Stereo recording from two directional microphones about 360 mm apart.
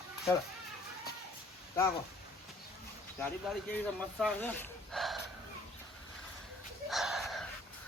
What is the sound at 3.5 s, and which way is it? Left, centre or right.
Speech, centre.